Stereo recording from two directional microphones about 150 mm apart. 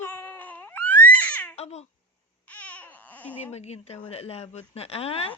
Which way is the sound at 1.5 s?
45° left (ahead or behind).